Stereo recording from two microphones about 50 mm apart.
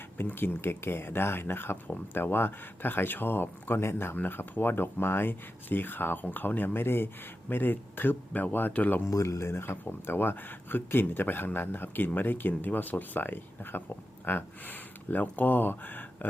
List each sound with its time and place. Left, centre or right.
0.2 s speech: left
8.3 s speech: left
9.0 s speech: left